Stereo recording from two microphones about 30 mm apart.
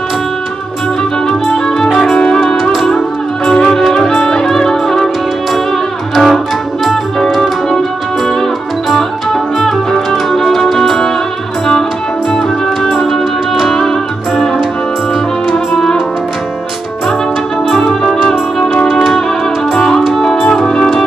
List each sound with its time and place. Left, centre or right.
2.0 s music: centre
3.6 s music: centre
6.1 s music: centre
8.9 s music: centre
12.3 s music: centre
17.6 s music: centre
19.7 s music: centre